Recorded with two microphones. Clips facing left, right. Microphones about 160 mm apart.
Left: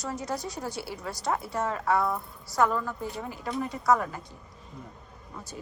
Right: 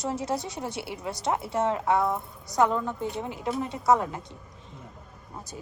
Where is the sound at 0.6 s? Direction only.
25° right (ahead or behind).